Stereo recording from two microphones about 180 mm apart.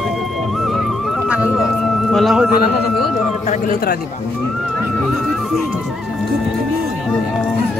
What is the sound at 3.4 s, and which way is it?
Speech, 55° left (ahead or behind).